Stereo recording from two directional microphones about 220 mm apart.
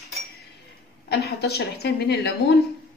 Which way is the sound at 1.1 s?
45° left (ahead or behind).